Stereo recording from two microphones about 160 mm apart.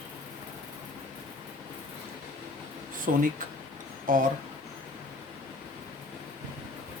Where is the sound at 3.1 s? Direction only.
60° right (ahead or behind).